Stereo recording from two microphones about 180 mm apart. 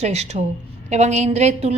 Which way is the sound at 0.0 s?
40° right (ahead or behind).